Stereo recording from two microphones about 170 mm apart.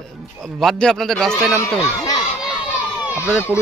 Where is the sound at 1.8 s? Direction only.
20° left (ahead or behind).